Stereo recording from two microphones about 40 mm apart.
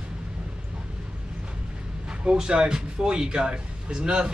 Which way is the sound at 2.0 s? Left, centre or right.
Right.